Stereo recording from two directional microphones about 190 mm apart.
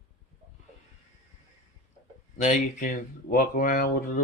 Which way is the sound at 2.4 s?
45° left (ahead or behind).